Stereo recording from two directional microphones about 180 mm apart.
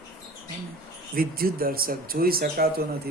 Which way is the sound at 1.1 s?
55° right (ahead or behind).